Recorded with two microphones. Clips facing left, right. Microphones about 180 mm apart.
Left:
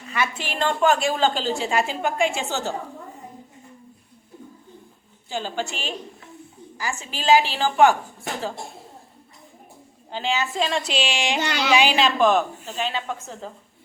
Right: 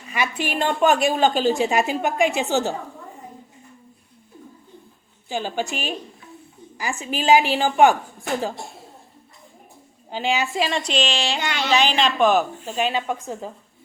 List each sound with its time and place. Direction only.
0.1 s a woman's voice: 15° right (ahead or behind)
5.3 s a woman's voice: 15° right (ahead or behind)
7.0 s a woman's voice: 15° right (ahead or behind)
10.1 s a woman's voice: 15° right (ahead or behind)
10.7 s speech: 5° left (ahead or behind)
12.6 s a woman's voice: 15° right (ahead or behind)